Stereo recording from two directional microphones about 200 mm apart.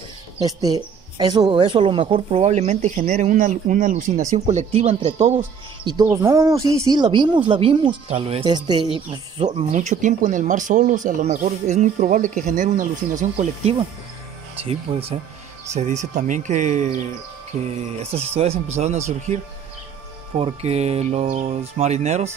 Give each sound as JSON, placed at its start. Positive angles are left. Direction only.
{"t": 0.4, "sound": "speech", "side_deg": -20}
{"t": 6.0, "sound": "speech", "side_deg": -15}
{"t": 18.1, "sound": "speech", "side_deg": -30}
{"t": 20.3, "sound": "speech", "side_deg": -30}